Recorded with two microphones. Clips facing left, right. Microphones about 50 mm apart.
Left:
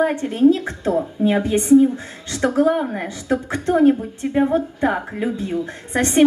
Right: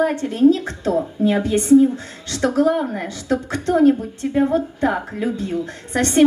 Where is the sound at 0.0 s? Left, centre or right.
Left.